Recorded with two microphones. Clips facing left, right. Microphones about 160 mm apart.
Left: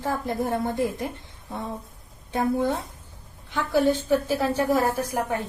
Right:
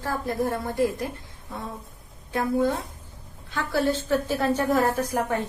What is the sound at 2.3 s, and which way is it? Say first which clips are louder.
A woman's voice: even; 20° left (ahead or behind).